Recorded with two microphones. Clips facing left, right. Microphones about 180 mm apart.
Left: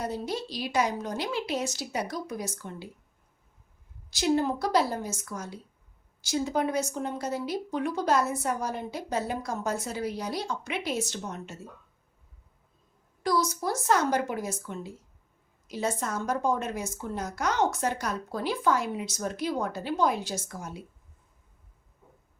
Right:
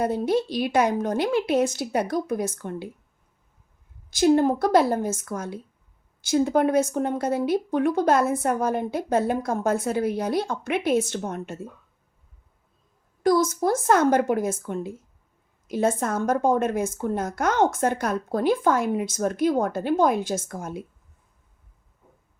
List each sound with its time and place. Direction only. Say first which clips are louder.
0.0 s speech: right 9 dB; 55° right (ahead or behind)
4.1 s a woman's voice: right 7 dB; 50° right (ahead or behind)
13.2 s a woman's voice: right 7 dB; 50° right (ahead or behind)